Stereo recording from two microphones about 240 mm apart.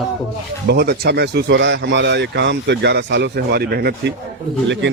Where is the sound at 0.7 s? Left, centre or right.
Right.